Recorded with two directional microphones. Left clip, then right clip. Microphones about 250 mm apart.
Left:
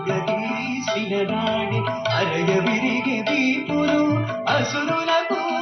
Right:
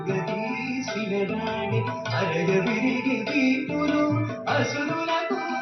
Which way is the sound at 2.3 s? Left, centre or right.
Left.